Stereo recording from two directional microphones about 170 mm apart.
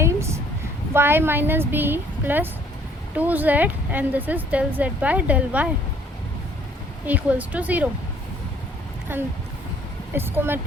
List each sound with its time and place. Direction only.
0.0 s a sound: 15° right (ahead or behind)
0.9 s speech: 15° right (ahead or behind)
7.0 s speech: 10° right (ahead or behind)
9.1 s speech: 10° right (ahead or behind)